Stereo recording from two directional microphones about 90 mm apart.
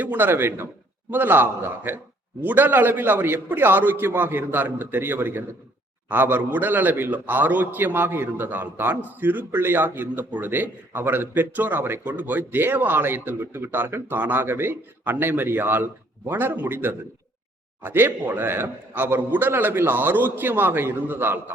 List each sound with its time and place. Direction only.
0.0 s a man's voice: 20° right (ahead or behind)